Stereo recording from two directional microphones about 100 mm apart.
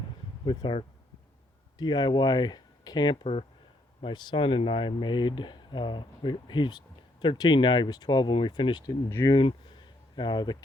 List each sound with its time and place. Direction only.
0.4 s speech: 50° left (ahead or behind)
1.8 s speech: 50° left (ahead or behind)
9.0 s speech: 30° left (ahead or behind)
9.3 s speech: 55° left (ahead or behind)